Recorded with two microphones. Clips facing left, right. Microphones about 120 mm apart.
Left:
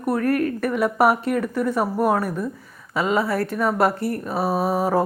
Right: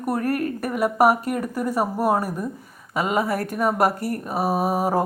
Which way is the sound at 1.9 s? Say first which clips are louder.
Left 1 dB; 10° right (ahead or behind).